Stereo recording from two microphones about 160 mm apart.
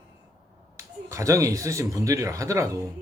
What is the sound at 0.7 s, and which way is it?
Speech, 20° right (ahead or behind).